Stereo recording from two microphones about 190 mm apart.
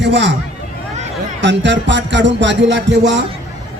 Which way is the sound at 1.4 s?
70° right (ahead or behind).